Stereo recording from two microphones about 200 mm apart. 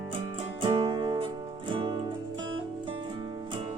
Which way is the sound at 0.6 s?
25° right (ahead or behind).